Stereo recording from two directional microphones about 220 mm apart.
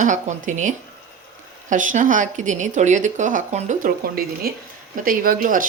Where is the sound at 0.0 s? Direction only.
35° right (ahead or behind).